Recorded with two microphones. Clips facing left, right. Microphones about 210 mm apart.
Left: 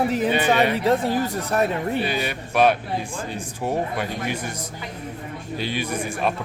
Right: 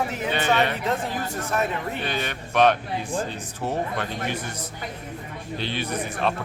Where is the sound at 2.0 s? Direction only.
10° left (ahead or behind).